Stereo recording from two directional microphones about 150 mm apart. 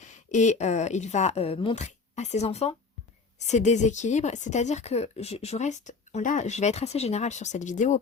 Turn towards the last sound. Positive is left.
turn(degrees=55)  # may be behind; listen again after turning